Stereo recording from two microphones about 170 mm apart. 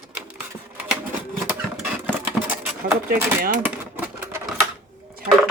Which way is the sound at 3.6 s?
15° right (ahead or behind).